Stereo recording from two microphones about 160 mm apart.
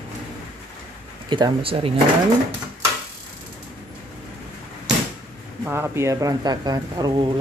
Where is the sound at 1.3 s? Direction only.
30° right (ahead or behind).